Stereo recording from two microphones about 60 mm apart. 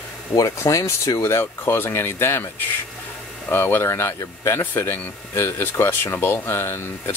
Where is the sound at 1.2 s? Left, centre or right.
Left.